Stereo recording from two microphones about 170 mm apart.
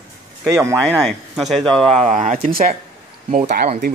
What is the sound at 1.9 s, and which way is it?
Speech, 40° right (ahead or behind).